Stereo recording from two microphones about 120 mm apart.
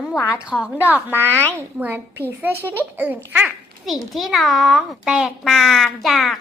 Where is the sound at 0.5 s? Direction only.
5° left (ahead or behind).